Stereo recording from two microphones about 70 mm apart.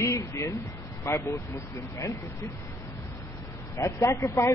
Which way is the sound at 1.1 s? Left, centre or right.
Left.